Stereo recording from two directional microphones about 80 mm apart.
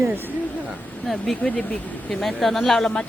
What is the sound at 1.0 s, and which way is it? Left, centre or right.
Speech, centre.